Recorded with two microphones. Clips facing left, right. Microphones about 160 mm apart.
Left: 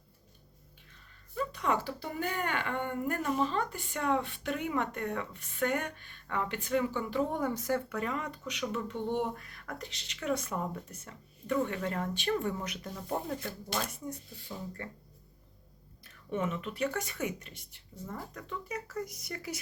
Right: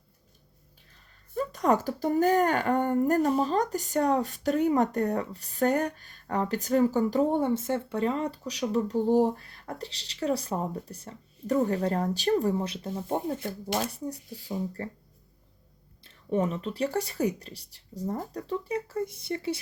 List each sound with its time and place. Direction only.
1.4 s speech: 40° right (ahead or behind)
16.0 s speech: 35° right (ahead or behind)